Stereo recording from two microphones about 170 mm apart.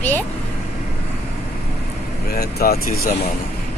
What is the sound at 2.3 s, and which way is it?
Speech, 65° left (ahead or behind).